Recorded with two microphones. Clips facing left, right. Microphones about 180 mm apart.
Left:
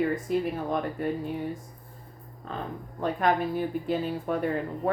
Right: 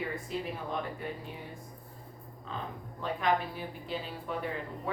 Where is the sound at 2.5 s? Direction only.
50° left (ahead or behind).